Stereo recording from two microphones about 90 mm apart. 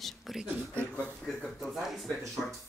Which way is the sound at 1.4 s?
Centre (ahead or behind).